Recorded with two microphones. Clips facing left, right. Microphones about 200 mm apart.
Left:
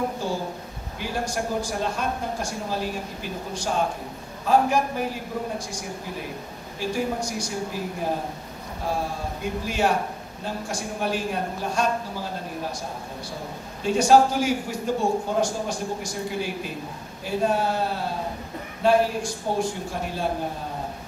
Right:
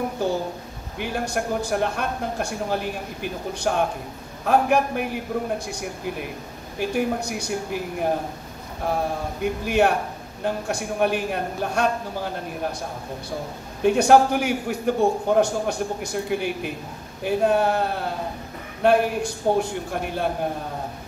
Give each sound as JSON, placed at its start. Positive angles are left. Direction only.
{"t": 0.2, "sound": "a man's voice", "side_deg": -60}
{"t": 6.8, "sound": "a man's voice", "side_deg": -60}
{"t": 9.4, "sound": "a man's voice", "side_deg": -60}
{"t": 13.8, "sound": "a man's voice", "side_deg": -60}